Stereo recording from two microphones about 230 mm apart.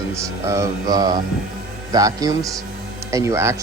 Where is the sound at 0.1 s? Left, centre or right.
Centre.